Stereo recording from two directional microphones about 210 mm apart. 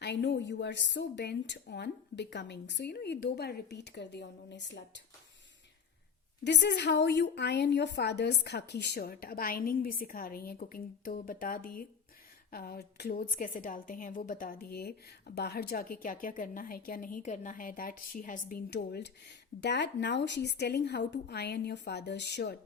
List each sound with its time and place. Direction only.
0.0 s a woman's voice: 55° left (ahead or behind)
6.4 s a woman's voice: 55° left (ahead or behind)